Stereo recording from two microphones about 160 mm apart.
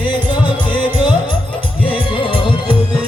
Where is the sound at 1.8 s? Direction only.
30° left (ahead or behind).